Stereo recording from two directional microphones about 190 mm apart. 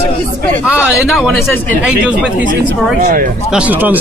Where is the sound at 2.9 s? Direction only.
45° right (ahead or behind).